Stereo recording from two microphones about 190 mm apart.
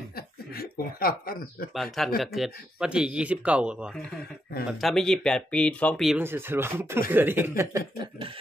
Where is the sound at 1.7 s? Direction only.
Centre (ahead or behind).